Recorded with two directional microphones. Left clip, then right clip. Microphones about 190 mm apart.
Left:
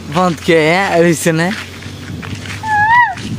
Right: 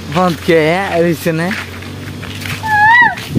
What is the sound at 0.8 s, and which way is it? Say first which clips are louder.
Speech: left 2 dB; 25° left (ahead or behind).